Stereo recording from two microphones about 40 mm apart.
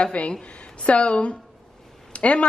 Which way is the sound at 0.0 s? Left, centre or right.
Left.